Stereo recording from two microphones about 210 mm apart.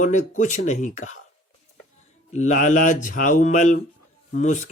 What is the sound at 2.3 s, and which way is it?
Speech, 35° left (ahead or behind).